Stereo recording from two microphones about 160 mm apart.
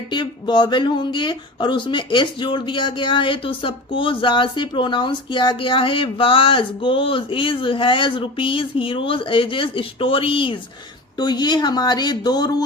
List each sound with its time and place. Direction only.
0.1 s speech: 30° left (ahead or behind)